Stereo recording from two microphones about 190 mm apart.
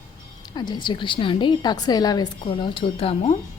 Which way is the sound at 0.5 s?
20° left (ahead or behind).